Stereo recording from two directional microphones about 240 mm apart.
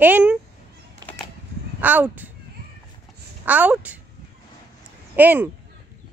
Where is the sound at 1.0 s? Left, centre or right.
Centre.